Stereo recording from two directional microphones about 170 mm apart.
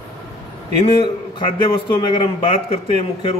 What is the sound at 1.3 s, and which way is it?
A man's voice, 30° left (ahead or behind).